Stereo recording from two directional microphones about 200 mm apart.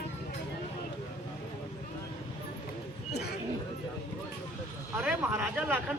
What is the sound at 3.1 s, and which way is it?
Speech, 55° left (ahead or behind).